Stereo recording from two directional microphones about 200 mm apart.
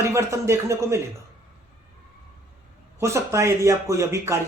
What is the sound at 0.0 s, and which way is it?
Speech, 15° right (ahead or behind).